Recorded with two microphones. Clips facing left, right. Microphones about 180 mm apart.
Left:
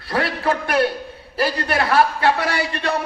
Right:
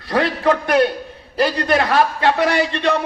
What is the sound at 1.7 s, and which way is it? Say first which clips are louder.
Speech: left 1 dB; 20° right (ahead or behind).